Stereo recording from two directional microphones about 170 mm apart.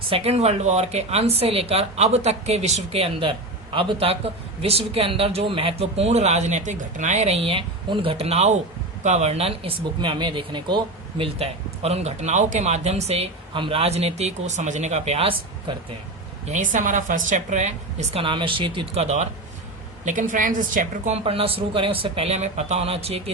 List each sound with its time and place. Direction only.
0.1 s speech: 35° right (ahead or behind)
16.5 s speech: 45° right (ahead or behind)